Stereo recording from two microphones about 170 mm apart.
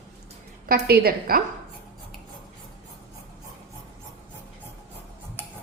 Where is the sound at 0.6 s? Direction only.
65° right (ahead or behind).